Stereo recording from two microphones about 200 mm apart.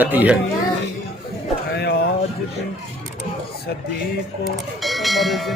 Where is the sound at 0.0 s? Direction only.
10° right (ahead or behind).